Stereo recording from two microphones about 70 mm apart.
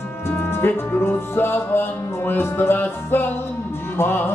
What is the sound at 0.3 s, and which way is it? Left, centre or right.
Music, left.